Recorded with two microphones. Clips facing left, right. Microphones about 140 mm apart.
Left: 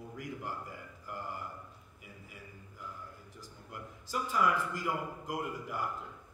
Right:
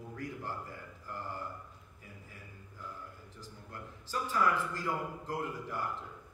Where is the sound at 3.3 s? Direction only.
15° left (ahead or behind).